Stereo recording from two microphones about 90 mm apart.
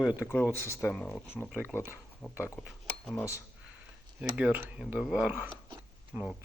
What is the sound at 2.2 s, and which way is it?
Speech, 5° right (ahead or behind).